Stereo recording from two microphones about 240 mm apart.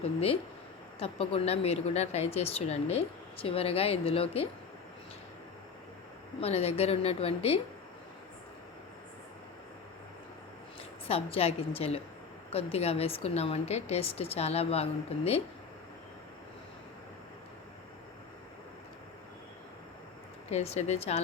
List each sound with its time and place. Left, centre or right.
0.9 s speech: left
6.4 s speech: left
11.0 s speech: left
20.5 s speech: left